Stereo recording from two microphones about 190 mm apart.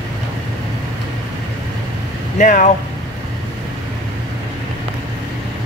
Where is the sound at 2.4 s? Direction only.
45° left (ahead or behind).